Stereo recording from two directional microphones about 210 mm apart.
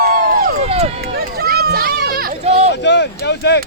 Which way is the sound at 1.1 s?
45° right (ahead or behind).